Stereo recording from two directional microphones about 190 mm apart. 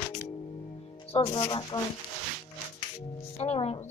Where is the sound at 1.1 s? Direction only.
30° left (ahead or behind).